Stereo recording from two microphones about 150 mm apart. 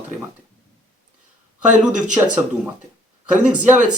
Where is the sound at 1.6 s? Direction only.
55° right (ahead or behind).